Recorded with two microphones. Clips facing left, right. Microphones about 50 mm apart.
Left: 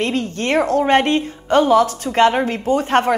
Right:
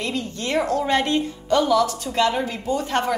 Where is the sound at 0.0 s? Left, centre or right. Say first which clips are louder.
Left 6 dB; left.